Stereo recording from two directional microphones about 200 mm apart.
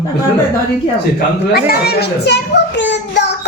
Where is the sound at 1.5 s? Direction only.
50° left (ahead or behind).